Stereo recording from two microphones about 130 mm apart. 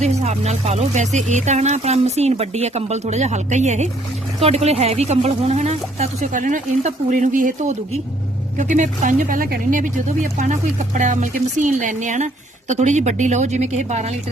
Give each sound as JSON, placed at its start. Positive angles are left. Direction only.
{"t": 0.0, "sound": "speech", "side_deg": -60}
{"t": 4.4, "sound": "speech", "side_deg": -55}
{"t": 6.3, "sound": "speech", "side_deg": -85}
{"t": 8.5, "sound": "speech", "side_deg": -70}
{"t": 10.3, "sound": "speech", "side_deg": -70}